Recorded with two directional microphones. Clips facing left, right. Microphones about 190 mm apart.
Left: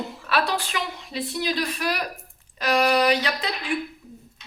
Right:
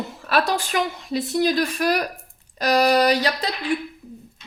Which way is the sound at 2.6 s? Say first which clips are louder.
Right 3 dB; 40° right (ahead or behind).